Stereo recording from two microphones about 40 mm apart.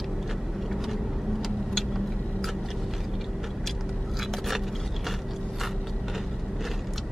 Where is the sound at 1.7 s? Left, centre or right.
Centre.